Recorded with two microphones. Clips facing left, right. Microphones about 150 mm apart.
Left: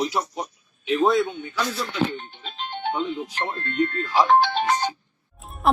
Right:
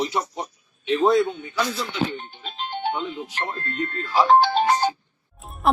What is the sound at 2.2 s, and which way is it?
Music, 5° right (ahead or behind).